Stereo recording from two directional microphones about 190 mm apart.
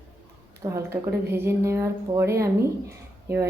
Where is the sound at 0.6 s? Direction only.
15° right (ahead or behind).